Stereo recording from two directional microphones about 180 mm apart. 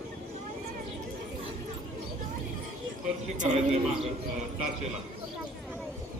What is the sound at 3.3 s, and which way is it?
Speech, 40° right (ahead or behind).